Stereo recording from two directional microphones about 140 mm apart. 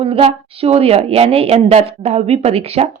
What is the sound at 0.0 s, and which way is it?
A woman's voice, 45° right (ahead or behind).